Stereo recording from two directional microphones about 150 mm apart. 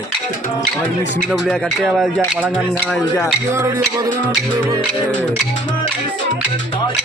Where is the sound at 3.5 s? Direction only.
20° right (ahead or behind).